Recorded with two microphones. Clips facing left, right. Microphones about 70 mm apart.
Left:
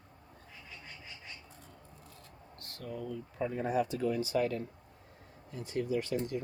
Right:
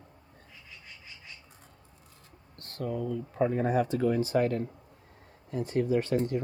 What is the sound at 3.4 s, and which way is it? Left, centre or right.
Speech, right.